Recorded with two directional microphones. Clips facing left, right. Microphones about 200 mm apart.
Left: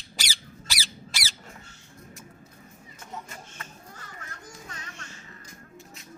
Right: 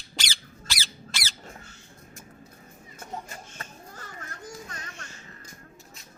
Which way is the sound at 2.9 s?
40° right (ahead or behind).